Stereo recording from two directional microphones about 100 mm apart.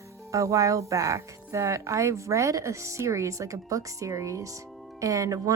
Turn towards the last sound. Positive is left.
turn(degrees=-35)  # may be behind; listen again after turning